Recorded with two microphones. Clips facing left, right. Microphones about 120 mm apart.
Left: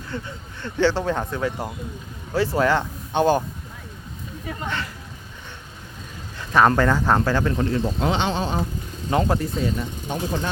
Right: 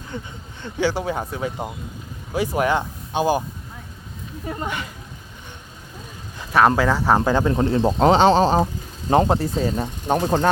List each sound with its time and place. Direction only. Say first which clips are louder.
0.1 s speech: left 1 dB; 15° right (ahead or behind)
4.6 s speech: even; 10° right (ahead or behind)
6.4 s speech: right 1 dB; 5° right (ahead or behind)
7.3 s speech: right 3 dB; 15° right (ahead or behind)
7.5 s speech: right 4 dB; 35° right (ahead or behind)
10.2 s speech: right 7 dB; 60° right (ahead or behind)